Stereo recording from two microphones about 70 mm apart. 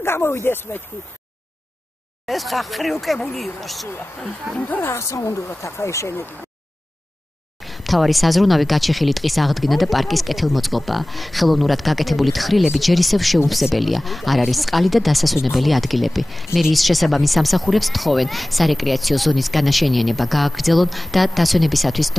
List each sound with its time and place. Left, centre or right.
0.0 s speech: left
2.2 s speech: centre
4.6 s speech: left
4.8 s speech: left
7.6 s speech: centre